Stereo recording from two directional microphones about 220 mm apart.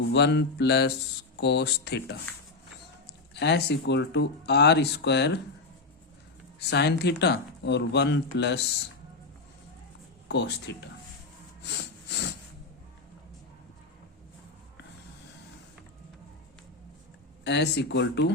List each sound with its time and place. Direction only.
0.1 s speech: 50° left (ahead or behind)
3.3 s speech: 50° left (ahead or behind)
6.6 s speech: 50° left (ahead or behind)
10.2 s speech: 50° left (ahead or behind)
11.6 s snort: 50° left (ahead or behind)
17.4 s speech: 50° left (ahead or behind)